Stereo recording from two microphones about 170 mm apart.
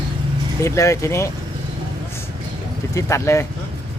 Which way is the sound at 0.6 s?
15° left (ahead or behind).